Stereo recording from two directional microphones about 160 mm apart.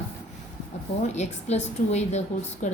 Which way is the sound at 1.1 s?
45° left (ahead or behind).